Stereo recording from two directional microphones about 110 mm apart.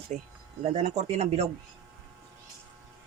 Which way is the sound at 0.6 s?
90° right.